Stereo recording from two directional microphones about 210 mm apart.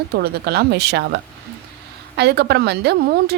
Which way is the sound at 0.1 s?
50° right (ahead or behind).